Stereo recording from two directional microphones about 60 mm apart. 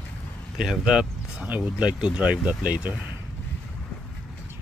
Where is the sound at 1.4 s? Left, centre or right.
Right.